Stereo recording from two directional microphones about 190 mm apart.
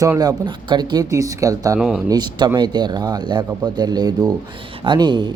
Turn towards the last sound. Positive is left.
turn(degrees=-25)  # may be behind; listen again after turning